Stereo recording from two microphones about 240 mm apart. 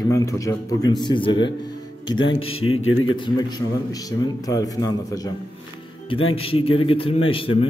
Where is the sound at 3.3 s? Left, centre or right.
Centre.